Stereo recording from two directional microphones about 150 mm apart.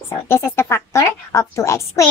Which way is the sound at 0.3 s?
15° left (ahead or behind).